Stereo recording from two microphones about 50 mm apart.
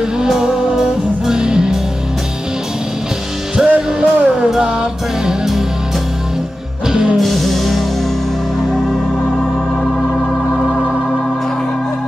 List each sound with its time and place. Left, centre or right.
0.2 s music: centre
3.5 s music: centre
6.9 s music: centre
7.2 s music: centre